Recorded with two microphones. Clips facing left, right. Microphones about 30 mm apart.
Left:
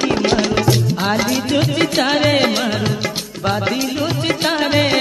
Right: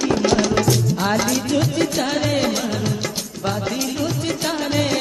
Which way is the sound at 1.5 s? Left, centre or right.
Left.